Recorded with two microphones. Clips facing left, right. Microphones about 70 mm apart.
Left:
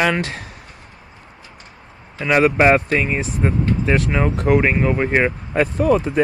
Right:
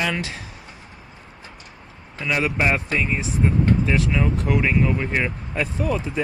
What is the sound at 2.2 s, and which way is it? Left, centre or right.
Speech, left.